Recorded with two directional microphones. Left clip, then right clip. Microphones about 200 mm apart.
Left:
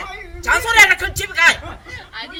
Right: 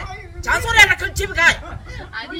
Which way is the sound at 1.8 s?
Centre (ahead or behind).